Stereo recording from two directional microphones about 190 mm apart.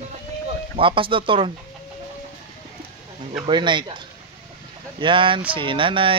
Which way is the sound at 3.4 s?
25° right (ahead or behind).